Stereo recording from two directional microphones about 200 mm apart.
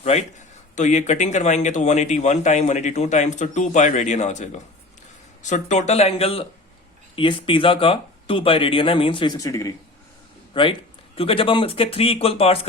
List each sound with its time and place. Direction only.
0.0 s a man's voice: 35° left (ahead or behind)